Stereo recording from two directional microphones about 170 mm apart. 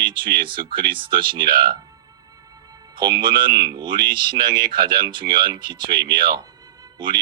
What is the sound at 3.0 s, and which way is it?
Speech, 60° right (ahead or behind).